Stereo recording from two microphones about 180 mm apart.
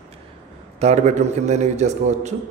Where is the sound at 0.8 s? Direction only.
40° right (ahead or behind).